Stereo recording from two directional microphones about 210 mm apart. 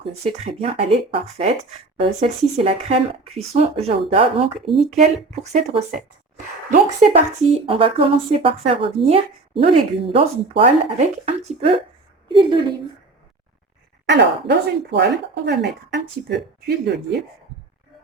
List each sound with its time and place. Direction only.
0.0 s speech: 30° right (ahead or behind)
4.7 s speech: centre (ahead or behind)
5.0 s a woman's voice: 30° right (ahead or behind)
7.7 s speech: 25° right (ahead or behind)
14.1 s speech: 55° right (ahead or behind)